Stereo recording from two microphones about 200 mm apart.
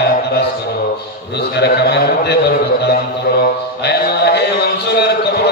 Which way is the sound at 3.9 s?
55° left (ahead or behind).